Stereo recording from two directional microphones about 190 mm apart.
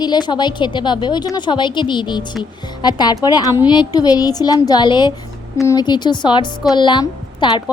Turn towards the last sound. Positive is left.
turn(degrees=25)  # may be behind; listen again after turning